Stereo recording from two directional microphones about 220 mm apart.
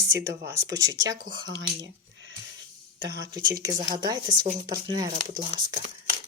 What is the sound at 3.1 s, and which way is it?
Speech, 15° right (ahead or behind).